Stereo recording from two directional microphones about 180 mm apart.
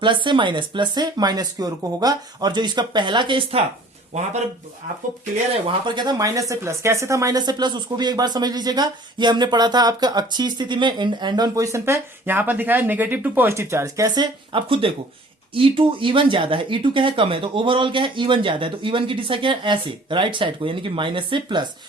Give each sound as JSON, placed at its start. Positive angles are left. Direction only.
{"t": 0.0, "sound": "speech", "side_deg": -25}
{"t": 5.6, "sound": "speech", "side_deg": -25}